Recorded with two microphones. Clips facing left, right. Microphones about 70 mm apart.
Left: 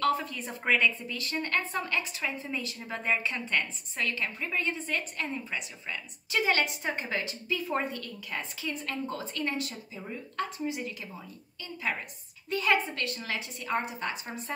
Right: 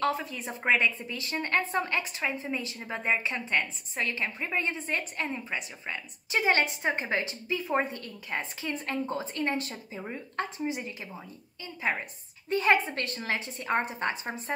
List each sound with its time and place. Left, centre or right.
0.2 s a woman's voice: centre